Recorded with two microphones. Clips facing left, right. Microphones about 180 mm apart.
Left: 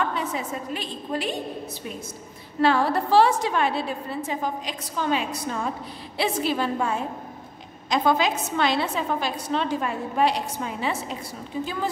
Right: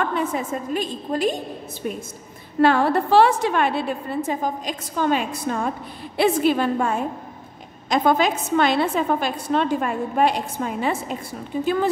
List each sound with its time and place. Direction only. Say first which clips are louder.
0.0 s a woman's voice: right 4 dB; 55° right (ahead or behind)
2.6 s a woman's voice: right 4 dB; 55° right (ahead or behind)